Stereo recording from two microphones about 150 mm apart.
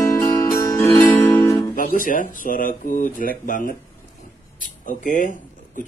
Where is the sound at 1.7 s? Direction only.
70° left (ahead or behind).